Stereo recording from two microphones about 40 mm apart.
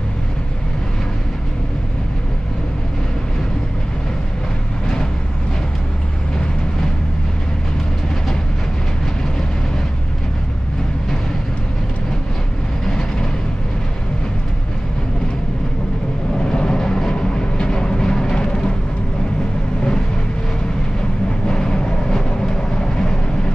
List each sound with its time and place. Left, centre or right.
12.8 s vehicle: centre
16.4 s vehicle: centre
21.5 s vehicle: centre